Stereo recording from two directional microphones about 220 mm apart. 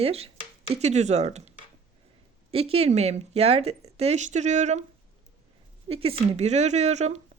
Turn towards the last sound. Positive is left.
turn(degrees=-30)  # may be behind; listen again after turning